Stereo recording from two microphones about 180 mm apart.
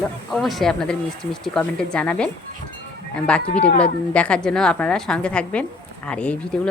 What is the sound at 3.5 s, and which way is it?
Speech, 35° left (ahead or behind).